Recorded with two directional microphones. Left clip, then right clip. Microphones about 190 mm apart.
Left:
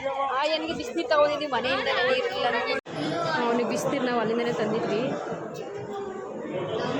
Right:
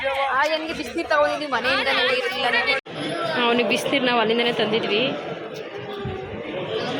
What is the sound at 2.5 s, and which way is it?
Speech, 40° left (ahead or behind).